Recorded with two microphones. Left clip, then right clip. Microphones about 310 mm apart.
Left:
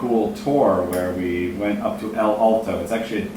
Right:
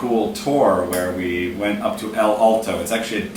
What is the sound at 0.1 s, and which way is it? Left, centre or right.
A woman's voice, left.